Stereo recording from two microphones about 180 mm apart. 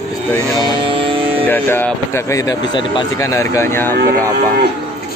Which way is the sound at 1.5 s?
10° left (ahead or behind).